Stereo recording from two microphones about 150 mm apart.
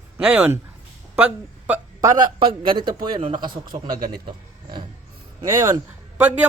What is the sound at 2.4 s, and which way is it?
Speech, 35° right (ahead or behind).